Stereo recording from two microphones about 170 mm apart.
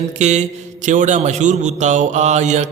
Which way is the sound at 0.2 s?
45° right (ahead or behind).